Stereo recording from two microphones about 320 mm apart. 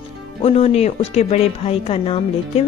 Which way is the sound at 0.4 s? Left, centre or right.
Centre.